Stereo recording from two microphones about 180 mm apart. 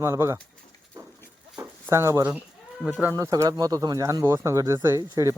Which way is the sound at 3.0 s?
15° right (ahead or behind).